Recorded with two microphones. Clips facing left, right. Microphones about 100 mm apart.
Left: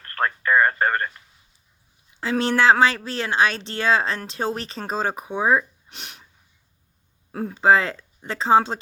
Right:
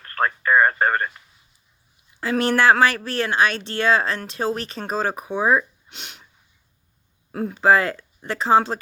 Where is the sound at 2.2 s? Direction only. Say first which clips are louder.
Right 1 dB; 25° left (ahead or behind).